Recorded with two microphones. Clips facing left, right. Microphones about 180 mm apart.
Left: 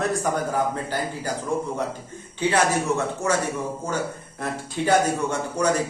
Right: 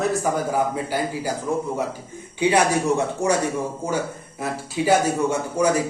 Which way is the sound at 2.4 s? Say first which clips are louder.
Right 3 dB; 15° right (ahead or behind).